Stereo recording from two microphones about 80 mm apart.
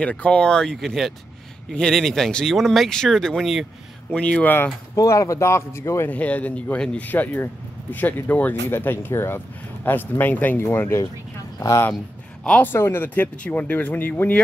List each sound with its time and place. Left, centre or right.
0.0 s speech: centre
4.1 s speech: centre
4.9 s speech: left
6.0 s speech: centre
12.4 s speech: centre
12.7 s speech: left